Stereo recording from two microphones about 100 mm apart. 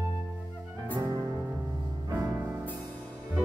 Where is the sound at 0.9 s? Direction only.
40° right (ahead or behind).